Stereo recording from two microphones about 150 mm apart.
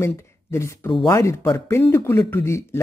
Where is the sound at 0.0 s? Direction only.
20° left (ahead or behind).